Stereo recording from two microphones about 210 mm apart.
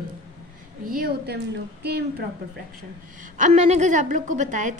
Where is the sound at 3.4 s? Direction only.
35° right (ahead or behind).